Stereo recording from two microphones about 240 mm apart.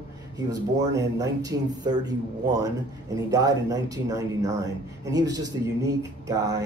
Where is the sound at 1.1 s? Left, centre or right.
Centre.